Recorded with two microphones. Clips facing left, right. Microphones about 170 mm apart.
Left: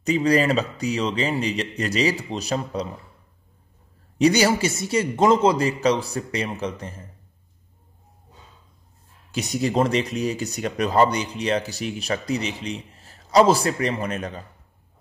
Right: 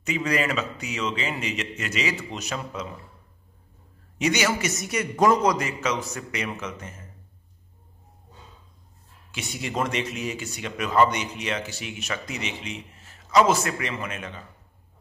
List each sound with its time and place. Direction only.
0.0 s speech: 35° left (ahead or behind)
4.2 s speech: 35° left (ahead or behind)
9.3 s speech: 40° left (ahead or behind)